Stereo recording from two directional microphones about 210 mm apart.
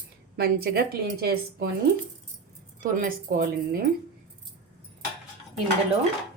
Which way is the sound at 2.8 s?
40° right (ahead or behind).